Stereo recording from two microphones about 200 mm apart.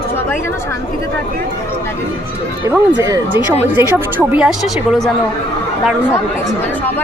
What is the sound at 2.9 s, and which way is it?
A woman's voice, 20° right (ahead or behind).